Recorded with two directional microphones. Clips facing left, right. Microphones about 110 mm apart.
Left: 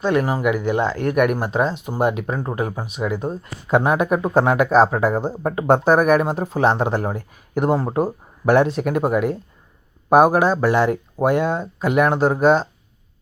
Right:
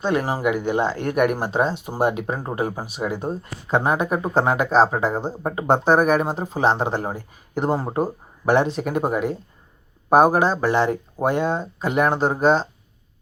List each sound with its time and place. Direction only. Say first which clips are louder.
0.0 s speech: left 2 dB; 30° right (ahead or behind)
3.2 s speech: left 2 dB; 5° left (ahead or behind)
5.4 s speech: left 3 dB; 5° right (ahead or behind)
5.6 s speech: left 2 dB; 5° left (ahead or behind)